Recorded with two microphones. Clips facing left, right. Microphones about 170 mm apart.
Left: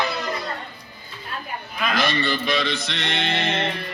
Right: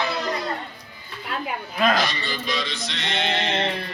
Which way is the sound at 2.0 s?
60° left (ahead or behind).